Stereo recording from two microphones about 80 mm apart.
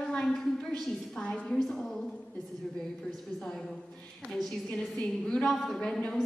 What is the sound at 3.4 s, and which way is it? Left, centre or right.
A woman's voice, centre.